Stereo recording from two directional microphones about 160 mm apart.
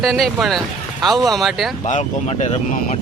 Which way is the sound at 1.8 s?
45° left (ahead or behind).